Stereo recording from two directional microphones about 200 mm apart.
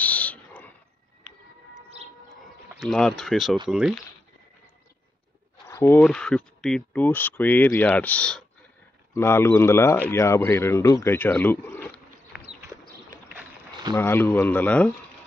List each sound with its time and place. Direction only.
0.0 s a sound: 5° left (ahead or behind)
2.7 s speech: centre (ahead or behind)
5.7 s a sound: 10° left (ahead or behind)
6.0 s speech: 5° left (ahead or behind)
12.4 s horse: 35° right (ahead or behind)
13.9 s speech: 10° left (ahead or behind)